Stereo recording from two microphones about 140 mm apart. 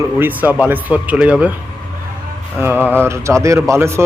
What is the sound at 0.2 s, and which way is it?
A man's voice, 10° right (ahead or behind).